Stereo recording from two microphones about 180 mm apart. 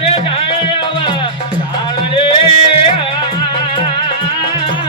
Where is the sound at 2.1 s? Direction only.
30° left (ahead or behind).